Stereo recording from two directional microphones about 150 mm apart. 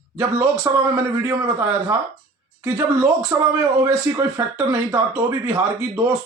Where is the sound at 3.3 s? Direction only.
20° right (ahead or behind).